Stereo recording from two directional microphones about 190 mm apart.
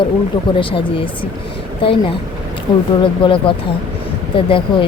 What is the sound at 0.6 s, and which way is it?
Speech, 30° left (ahead or behind).